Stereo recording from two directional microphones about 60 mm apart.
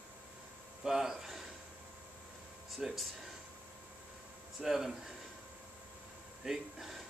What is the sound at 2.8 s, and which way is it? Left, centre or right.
Speech, centre.